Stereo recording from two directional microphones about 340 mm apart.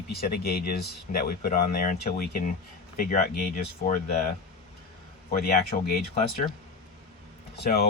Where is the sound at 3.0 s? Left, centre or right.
Left.